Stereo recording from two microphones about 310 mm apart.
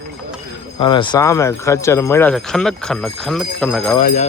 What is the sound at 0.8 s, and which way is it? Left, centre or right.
Speech, centre.